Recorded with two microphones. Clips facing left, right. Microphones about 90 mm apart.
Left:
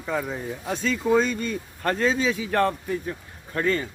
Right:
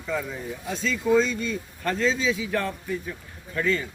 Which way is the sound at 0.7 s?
50° left (ahead or behind).